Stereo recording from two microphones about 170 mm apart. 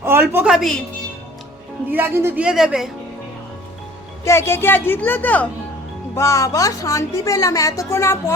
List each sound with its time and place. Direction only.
0.0 s a sound: 15° right (ahead or behind)
0.4 s a woman's voice: centre (ahead or behind)
1.9 s speech: 10° right (ahead or behind)
4.2 s a woman's voice: 15° left (ahead or behind)